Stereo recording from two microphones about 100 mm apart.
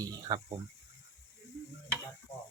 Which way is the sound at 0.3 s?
40° right (ahead or behind).